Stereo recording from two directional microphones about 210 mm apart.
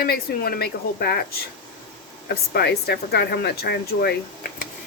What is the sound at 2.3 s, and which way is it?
Speech, 50° left (ahead or behind).